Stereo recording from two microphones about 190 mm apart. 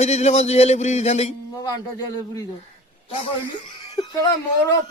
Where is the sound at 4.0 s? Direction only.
25° left (ahead or behind).